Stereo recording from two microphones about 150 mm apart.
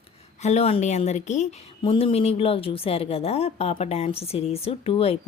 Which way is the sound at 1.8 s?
35° left (ahead or behind).